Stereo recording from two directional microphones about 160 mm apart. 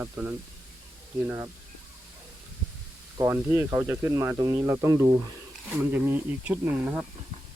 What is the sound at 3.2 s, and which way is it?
Speech, 20° right (ahead or behind).